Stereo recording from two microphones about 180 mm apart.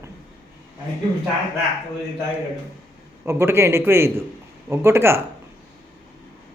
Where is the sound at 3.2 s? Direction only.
15° right (ahead or behind).